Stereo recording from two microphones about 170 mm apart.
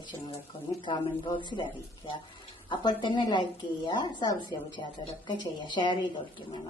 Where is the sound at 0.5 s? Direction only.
30° left (ahead or behind).